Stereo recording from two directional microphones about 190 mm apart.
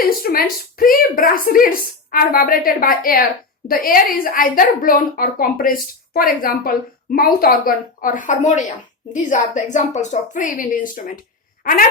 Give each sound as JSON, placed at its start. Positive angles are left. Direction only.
{"t": 0.2, "sound": "a woman's voice", "side_deg": 50}